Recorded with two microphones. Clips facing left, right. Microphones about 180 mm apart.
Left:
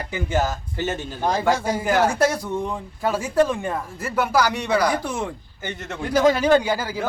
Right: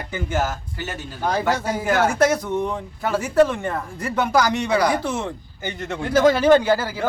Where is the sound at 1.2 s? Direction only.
10° left (ahead or behind).